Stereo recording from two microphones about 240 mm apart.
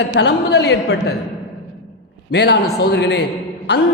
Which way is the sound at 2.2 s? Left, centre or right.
Left.